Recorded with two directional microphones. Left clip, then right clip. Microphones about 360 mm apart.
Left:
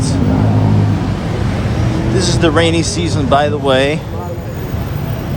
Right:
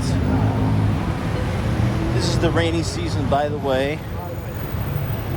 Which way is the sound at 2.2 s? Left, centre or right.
Centre.